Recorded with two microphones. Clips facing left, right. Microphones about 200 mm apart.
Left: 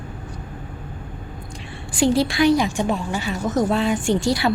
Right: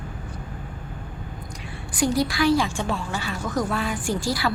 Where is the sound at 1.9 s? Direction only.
25° left (ahead or behind).